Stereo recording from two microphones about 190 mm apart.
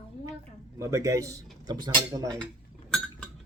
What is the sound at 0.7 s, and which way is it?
Speech, 15° right (ahead or behind).